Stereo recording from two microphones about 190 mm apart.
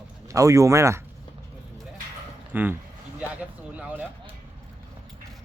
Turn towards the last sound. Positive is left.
turn(degrees=-10)  # may be behind; listen again after turning